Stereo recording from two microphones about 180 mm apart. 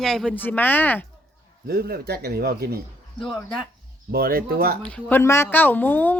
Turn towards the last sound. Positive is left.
turn(degrees=10)  # may be behind; listen again after turning